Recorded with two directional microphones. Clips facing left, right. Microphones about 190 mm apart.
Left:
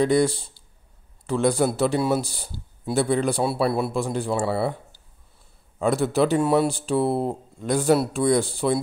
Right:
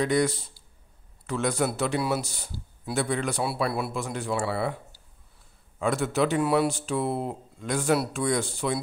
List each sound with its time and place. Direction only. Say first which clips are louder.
0.0 s a man's voice: left 5 dB; 30° left (ahead or behind)